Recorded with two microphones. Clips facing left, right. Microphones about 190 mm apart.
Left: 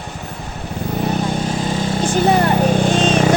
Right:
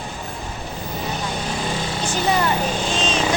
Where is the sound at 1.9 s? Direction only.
50° left (ahead or behind).